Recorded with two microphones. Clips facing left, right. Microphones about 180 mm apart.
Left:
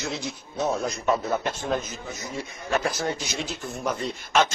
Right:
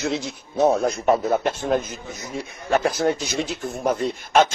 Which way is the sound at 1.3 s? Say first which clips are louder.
Right 5 dB; 50° right (ahead or behind).